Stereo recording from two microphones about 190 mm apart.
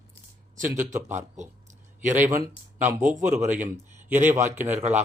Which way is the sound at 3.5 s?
10° right (ahead or behind).